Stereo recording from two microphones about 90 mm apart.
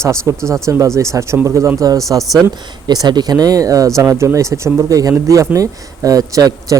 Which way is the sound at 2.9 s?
50° right (ahead or behind).